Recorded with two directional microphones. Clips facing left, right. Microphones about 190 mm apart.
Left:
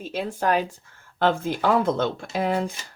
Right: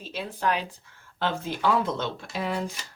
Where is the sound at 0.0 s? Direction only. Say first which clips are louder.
Left 4 dB; 50° left (ahead or behind).